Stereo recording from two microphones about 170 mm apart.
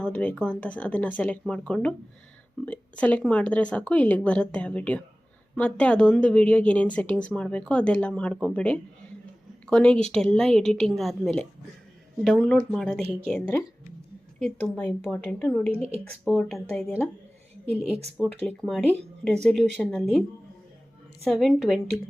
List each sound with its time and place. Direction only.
0.0 s a woman's voice: 10° left (ahead or behind)
15.7 s a woman's voice: 35° right (ahead or behind)
16.4 s a woman's voice: 5° left (ahead or behind)
18.4 s a woman's voice: 5° left (ahead or behind)
21.2 s a woman's voice: centre (ahead or behind)